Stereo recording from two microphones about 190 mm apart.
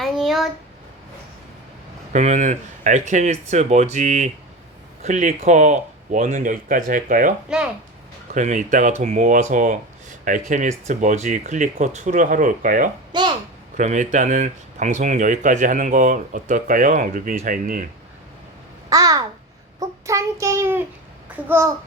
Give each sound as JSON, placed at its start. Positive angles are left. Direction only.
{"t": 0.0, "sound": "a sound", "side_deg": 0}
{"t": 2.1, "sound": "speech", "side_deg": -40}
{"t": 13.1, "sound": "a sound", "side_deg": -25}
{"t": 13.7, "sound": "speech", "side_deg": -40}
{"t": 18.9, "sound": "babbling", "side_deg": -20}
{"t": 19.8, "sound": "child singing", "side_deg": -15}
{"t": 21.4, "sound": "a child's voice", "side_deg": -15}